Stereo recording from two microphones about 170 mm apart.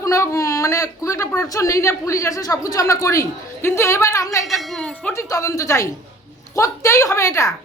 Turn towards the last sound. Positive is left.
turn(degrees=20)  # may be behind; listen again after turning